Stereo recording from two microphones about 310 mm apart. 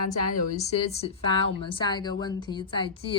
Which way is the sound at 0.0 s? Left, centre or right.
Left.